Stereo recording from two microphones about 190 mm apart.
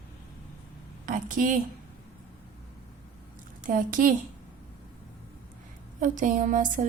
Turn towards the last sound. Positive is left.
turn(degrees=-45)  # may be behind; listen again after turning